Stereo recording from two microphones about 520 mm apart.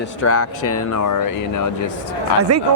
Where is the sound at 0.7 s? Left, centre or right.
Left.